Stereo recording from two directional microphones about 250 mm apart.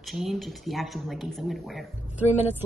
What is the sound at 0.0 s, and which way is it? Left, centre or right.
Speech, centre.